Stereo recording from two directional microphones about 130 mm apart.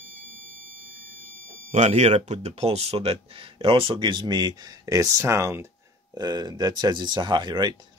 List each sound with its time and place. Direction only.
1.7 s speech: 65° right (ahead or behind); by 7.7 s 35° right (ahead or behind)